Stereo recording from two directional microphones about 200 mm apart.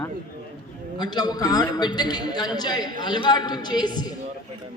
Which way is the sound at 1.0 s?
20° left (ahead or behind).